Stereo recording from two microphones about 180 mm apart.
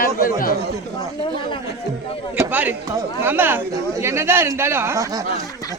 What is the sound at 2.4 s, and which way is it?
Speech, 10° right (ahead or behind).